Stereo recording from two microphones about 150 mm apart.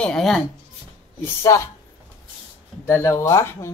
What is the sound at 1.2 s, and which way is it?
Speech, 20° left (ahead or behind).